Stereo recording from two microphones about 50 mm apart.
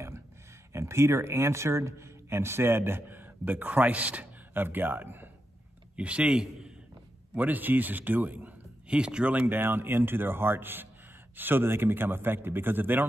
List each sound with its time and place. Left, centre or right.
0.7 s speech: right
4.6 s a man's voice: right
5.9 s a man's voice: right
7.3 s speech: right
8.8 s speech: centre
9.5 s a man's voice: right